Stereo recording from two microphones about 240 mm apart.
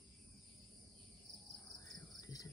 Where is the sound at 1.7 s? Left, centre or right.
Centre.